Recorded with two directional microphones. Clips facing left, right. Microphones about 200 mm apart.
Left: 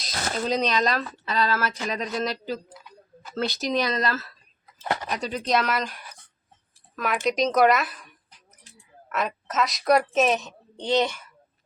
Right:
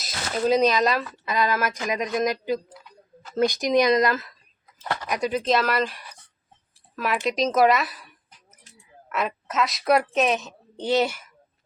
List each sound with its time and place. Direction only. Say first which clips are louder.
0.0 s a woman's voice: right 3 dB; 5° right (ahead or behind)